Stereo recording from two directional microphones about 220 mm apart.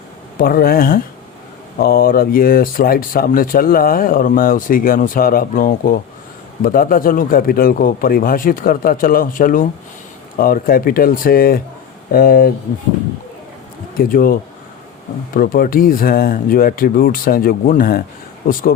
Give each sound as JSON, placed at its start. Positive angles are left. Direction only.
{"t": 0.3, "sound": "speech", "side_deg": 40}
{"t": 14.0, "sound": "speech", "side_deg": 40}
{"t": 15.4, "sound": "speech", "side_deg": 40}